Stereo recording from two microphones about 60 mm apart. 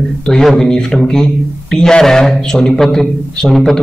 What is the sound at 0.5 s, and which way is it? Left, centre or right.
A man's voice, centre.